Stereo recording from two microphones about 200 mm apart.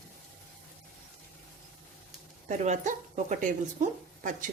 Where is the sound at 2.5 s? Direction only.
35° right (ahead or behind).